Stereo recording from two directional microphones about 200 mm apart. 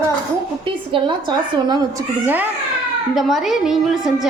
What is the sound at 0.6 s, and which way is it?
A woman's voice, 25° right (ahead or behind).